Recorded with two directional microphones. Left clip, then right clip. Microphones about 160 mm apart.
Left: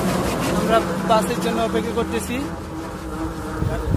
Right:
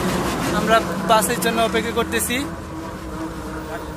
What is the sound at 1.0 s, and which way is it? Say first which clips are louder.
Speech: right 2 dB; centre (ahead or behind).